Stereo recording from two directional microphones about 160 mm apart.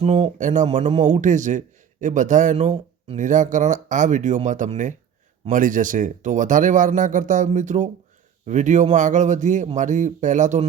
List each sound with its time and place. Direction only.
0.0 s speech: 45° right (ahead or behind)